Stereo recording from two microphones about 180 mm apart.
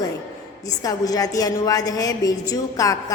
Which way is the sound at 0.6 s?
20° left (ahead or behind).